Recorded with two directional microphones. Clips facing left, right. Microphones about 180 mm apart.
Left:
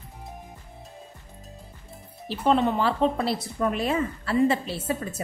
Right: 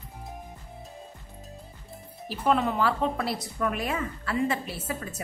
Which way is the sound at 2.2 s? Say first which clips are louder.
Left 3 dB; 25° left (ahead or behind).